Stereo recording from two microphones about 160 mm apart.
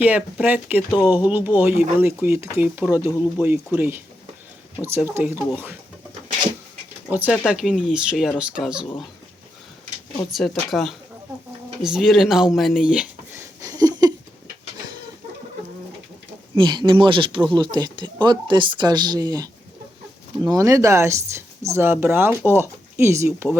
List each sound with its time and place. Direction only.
0.0 s speech: 10° right (ahead or behind)
7.3 s speech: 5° right (ahead or behind)
10.3 s speech: centre (ahead or behind)
11.8 s a sound: centre (ahead or behind); by 14.1 s 25° right (ahead or behind)
16.6 s speech: 30° right (ahead or behind)